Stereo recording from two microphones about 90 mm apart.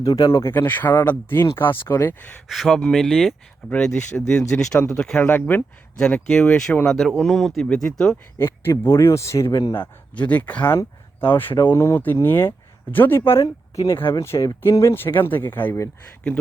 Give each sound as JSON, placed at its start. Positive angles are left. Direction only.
{"t": 0.0, "sound": "speech", "side_deg": 40}
{"t": 0.5, "sound": "speech", "side_deg": 20}
{"t": 2.5, "sound": "speech", "side_deg": 0}
{"t": 5.2, "sound": "speech", "side_deg": 20}
{"t": 6.0, "sound": "speech", "side_deg": 10}
{"t": 8.4, "sound": "speech", "side_deg": 25}
{"t": 9.7, "sound": "speech", "side_deg": 20}
{"t": 13.4, "sound": "speech", "side_deg": 40}
{"t": 13.9, "sound": "speech", "side_deg": 30}